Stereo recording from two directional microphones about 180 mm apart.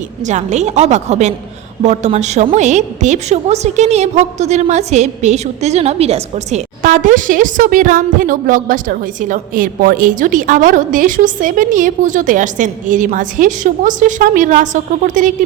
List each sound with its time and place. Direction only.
0.3 s a woman's voice: 40° right (ahead or behind)